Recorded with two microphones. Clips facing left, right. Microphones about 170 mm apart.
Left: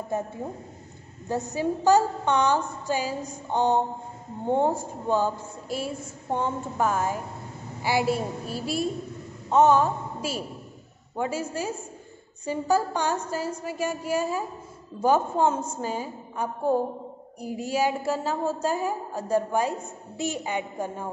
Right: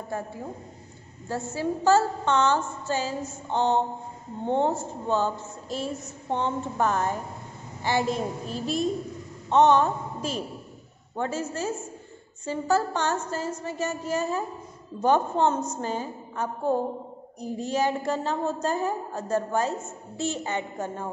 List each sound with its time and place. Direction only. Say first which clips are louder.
0.1 s a woman's voice: left 4 dB; 20° left (ahead or behind)
1.3 s a woman's voice: left 2 dB; 15° left (ahead or behind)